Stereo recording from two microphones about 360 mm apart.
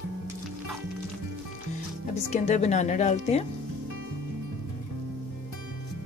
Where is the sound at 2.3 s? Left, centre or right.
Centre.